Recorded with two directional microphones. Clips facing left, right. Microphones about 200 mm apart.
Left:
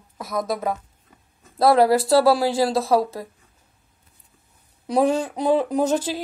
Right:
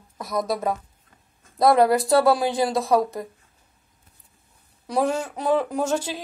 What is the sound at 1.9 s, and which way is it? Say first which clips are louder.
Speech: left 2 dB; centre (ahead or behind).